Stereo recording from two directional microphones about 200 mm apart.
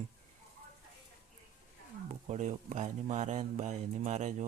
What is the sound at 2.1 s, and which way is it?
Speech, 35° right (ahead or behind).